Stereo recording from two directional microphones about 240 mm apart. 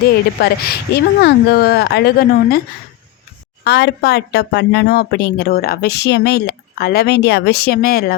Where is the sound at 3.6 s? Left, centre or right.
Left.